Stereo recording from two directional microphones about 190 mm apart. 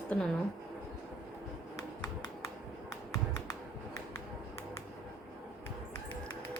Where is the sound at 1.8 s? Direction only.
15° left (ahead or behind).